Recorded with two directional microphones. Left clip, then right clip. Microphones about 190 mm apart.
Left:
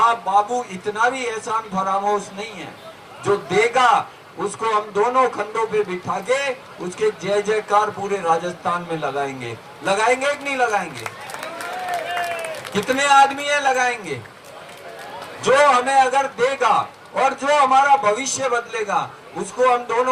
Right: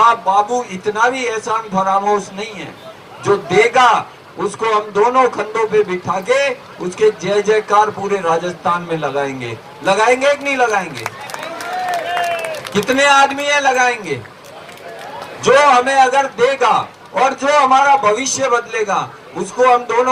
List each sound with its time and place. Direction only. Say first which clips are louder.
0.0 s a man's voice: right 5 dB; 15° left (ahead or behind)
12.7 s a man's voice: right 3 dB; 15° left (ahead or behind)
15.4 s a man's voice: right 5 dB; 15° left (ahead or behind)